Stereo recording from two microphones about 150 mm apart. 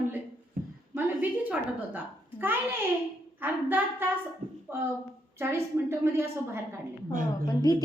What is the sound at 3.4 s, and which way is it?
A woman's voice, 10° right (ahead or behind).